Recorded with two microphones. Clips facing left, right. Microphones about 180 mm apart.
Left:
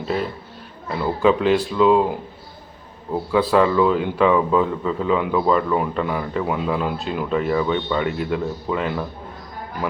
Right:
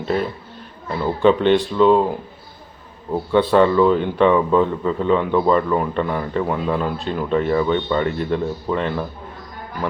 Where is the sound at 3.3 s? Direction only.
5° left (ahead or behind).